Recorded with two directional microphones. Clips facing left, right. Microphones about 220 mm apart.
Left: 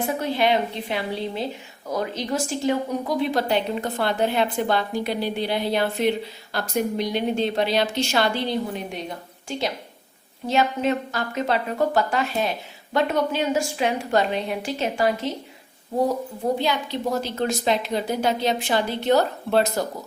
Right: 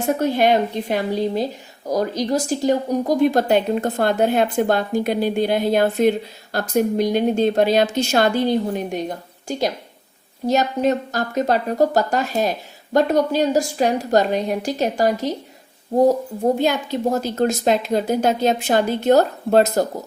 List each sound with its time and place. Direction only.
0.0 s speech: 45° right (ahead or behind)